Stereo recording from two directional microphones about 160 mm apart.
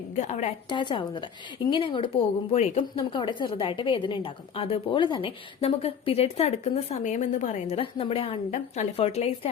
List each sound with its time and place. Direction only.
0.2 s a woman's voice: 45° left (ahead or behind)
0.7 s a woman's voice: 30° left (ahead or behind)
3.0 s a woman's voice: 30° left (ahead or behind)